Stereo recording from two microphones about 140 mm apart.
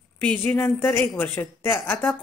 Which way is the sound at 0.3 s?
15° left (ahead or behind).